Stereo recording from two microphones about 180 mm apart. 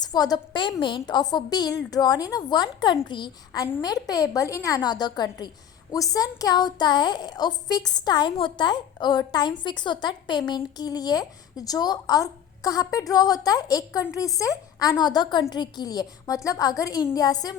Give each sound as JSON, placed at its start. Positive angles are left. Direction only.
{"t": 0.0, "sound": "a woman's voice", "side_deg": 20}